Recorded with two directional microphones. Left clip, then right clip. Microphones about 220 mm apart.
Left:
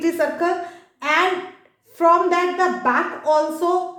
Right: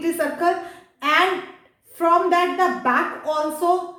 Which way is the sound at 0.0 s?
20° left (ahead or behind).